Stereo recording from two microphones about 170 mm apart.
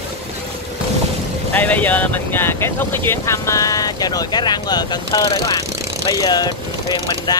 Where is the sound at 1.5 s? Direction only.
10° left (ahead or behind).